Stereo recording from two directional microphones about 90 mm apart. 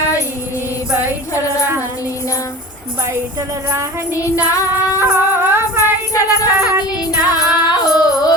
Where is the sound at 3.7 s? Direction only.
30° right (ahead or behind).